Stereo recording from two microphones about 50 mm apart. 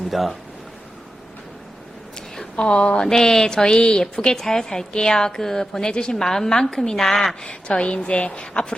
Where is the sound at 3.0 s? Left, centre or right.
Centre.